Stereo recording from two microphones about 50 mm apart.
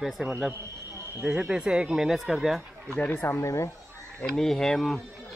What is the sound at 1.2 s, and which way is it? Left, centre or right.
Speech, right.